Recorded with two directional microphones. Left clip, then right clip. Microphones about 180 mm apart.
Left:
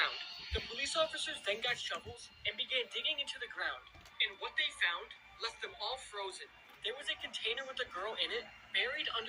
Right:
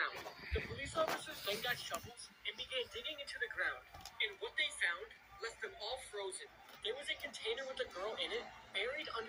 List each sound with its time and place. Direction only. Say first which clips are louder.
0.5 s speech: left 4 dB; 30° left (ahead or behind)
6.8 s speech: left 2 dB; 25° left (ahead or behind)